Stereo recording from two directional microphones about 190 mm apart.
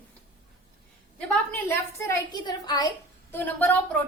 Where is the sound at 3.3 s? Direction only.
10° left (ahead or behind).